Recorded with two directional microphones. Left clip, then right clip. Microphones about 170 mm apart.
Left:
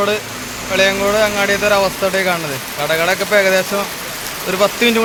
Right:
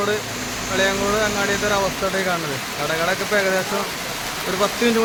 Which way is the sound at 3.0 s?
20° left (ahead or behind).